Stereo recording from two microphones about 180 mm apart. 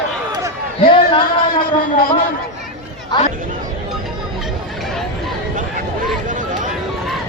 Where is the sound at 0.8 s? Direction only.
30° left (ahead or behind).